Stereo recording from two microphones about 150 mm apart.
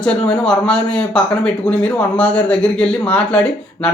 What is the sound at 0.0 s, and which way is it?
Speech, 5° left (ahead or behind).